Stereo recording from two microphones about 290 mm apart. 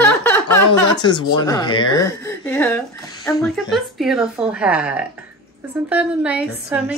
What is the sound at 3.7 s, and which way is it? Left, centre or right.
Speech, centre.